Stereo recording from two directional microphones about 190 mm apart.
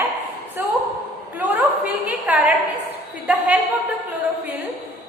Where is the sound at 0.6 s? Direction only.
10° right (ahead or behind).